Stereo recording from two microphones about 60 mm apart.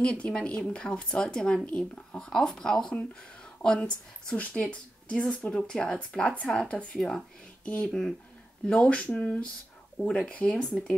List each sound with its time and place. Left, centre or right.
0.0 s speech: centre
7.6 s speech: left